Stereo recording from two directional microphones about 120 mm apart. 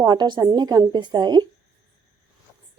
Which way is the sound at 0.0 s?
35° right (ahead or behind).